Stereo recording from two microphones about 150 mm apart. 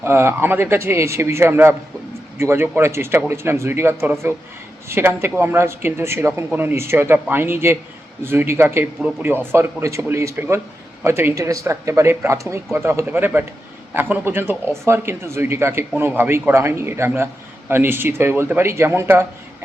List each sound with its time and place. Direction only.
0.0 s speech: 15° right (ahead or behind)